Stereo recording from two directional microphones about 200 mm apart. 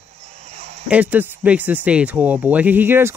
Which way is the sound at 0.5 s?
35° right (ahead or behind).